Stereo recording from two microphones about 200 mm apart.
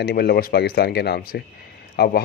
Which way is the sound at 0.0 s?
50° left (ahead or behind).